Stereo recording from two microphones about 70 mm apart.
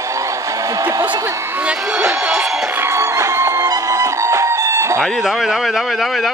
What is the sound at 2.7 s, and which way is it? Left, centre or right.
Music, right.